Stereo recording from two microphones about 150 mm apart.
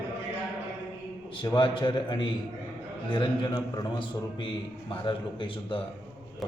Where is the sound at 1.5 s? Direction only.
35° left (ahead or behind).